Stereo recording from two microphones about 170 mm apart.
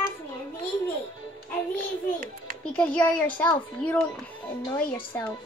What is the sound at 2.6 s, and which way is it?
A child's voice, 5° left (ahead or behind).